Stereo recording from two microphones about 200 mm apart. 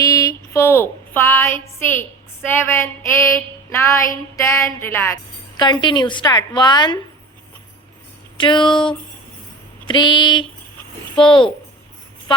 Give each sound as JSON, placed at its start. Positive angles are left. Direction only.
{"t": 0.0, "sound": "a sound", "side_deg": 15}
{"t": 5.8, "sound": "a woman's voice", "side_deg": 25}
{"t": 8.4, "sound": "a woman's voice", "side_deg": 25}
{"t": 9.8, "sound": "a woman's voice", "side_deg": 25}